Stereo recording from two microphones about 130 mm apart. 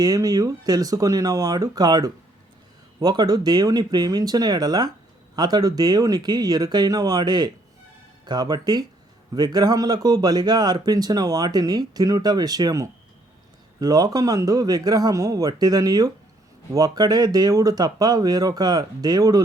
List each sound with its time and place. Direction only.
0.0 s a man's voice: 30° right (ahead or behind)